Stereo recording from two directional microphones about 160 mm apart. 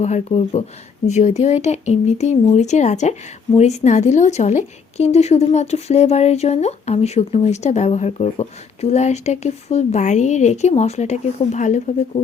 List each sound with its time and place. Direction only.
0.0 s speech: 45° left (ahead or behind)